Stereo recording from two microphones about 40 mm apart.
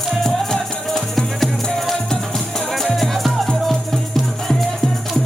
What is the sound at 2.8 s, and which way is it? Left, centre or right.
Music, centre.